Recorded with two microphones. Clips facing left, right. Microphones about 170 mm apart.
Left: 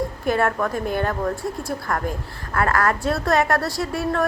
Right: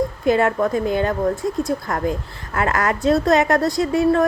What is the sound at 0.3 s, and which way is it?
A woman's voice, 15° right (ahead or behind).